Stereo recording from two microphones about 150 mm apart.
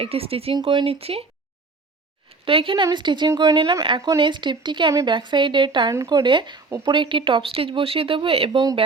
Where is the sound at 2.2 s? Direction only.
35° right (ahead or behind).